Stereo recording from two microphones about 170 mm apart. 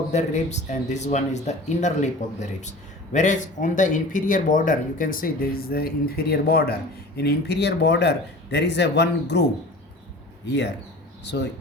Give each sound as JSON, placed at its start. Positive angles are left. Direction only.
{"t": 0.1, "sound": "a man's voice", "side_deg": 40}
{"t": 10.5, "sound": "speech", "side_deg": 90}